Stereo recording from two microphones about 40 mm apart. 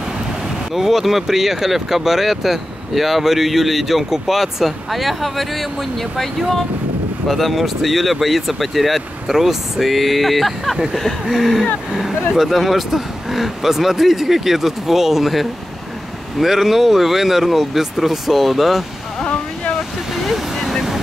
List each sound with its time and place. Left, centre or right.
0.7 s speech: centre
7.2 s speech: centre
10.9 s a sound: centre
11.2 s speech: centre
19.3 s waves: left
20.2 s vehicle: centre